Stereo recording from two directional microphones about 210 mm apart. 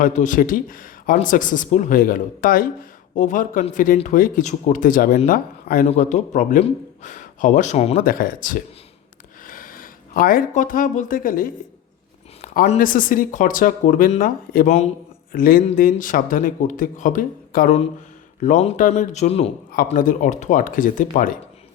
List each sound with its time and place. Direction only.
0.0 s speech: 35° left (ahead or behind)
19.7 s speech: 40° left (ahead or behind)